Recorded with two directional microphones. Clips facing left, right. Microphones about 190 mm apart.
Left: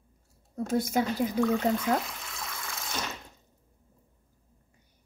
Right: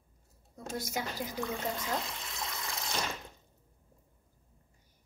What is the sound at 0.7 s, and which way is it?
Speech, 55° left (ahead or behind).